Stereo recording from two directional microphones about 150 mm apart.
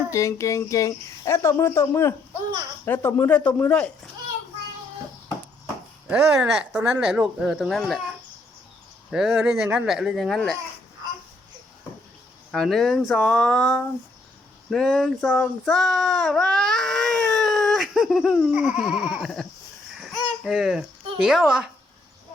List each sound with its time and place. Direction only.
0.1 s speech: 20° left (ahead or behind)
6.1 s speech: 10° right (ahead or behind)
9.0 s speech: 5° right (ahead or behind)
12.5 s speech: centre (ahead or behind)
14.7 s child singing: centre (ahead or behind)
20.0 s a sound: centre (ahead or behind)